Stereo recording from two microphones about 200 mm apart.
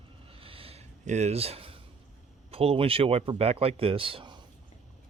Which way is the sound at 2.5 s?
30° right (ahead or behind).